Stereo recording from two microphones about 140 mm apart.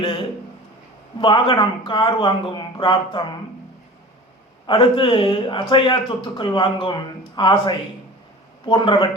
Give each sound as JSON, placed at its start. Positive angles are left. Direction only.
{"t": 1.2, "sound": "speech", "side_deg": 40}
{"t": 4.6, "sound": "speech", "side_deg": 35}